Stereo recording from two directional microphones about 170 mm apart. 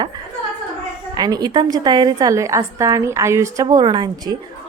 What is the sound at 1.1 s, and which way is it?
A woman's voice, 25° right (ahead or behind).